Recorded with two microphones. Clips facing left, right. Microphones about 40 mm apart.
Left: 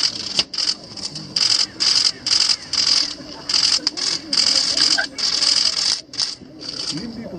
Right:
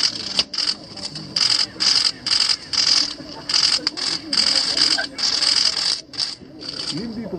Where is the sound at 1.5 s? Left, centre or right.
Centre.